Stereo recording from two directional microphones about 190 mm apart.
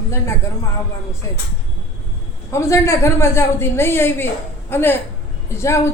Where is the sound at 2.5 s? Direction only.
15° left (ahead or behind).